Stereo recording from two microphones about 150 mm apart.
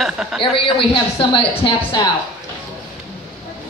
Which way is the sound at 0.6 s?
35° left (ahead or behind).